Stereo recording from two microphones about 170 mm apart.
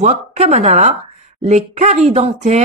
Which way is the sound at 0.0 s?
40° right (ahead or behind).